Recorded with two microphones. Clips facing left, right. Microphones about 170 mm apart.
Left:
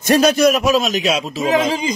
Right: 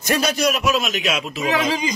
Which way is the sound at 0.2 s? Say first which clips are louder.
Left 7 dB; 50° left (ahead or behind).